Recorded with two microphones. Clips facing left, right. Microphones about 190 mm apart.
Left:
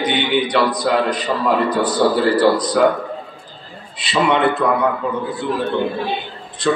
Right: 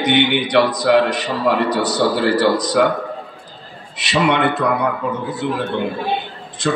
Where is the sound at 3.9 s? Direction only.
75° right (ahead or behind).